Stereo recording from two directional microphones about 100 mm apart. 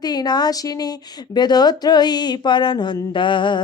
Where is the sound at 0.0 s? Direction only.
40° left (ahead or behind).